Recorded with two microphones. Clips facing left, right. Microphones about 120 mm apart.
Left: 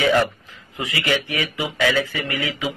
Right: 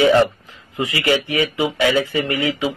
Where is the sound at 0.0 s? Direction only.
25° right (ahead or behind).